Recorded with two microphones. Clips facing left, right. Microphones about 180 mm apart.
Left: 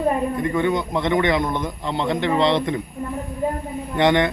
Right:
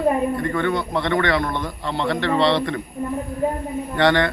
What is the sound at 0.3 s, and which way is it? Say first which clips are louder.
Speech: left 1 dB; 15° left (ahead or behind).